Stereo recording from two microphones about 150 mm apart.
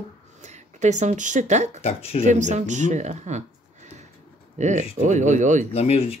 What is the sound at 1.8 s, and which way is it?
Speech, 40° left (ahead or behind).